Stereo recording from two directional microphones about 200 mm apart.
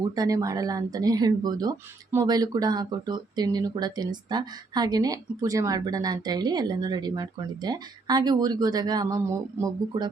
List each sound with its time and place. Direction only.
0.2 s speech: 15° right (ahead or behind)